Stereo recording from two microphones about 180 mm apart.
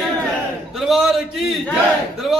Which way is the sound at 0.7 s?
Centre (ahead or behind).